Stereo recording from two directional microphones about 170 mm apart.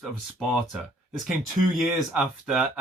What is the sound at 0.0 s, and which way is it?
Speech, centre (ahead or behind).